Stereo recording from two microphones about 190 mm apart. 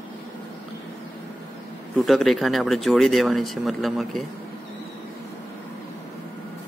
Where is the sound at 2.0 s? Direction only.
Centre (ahead or behind).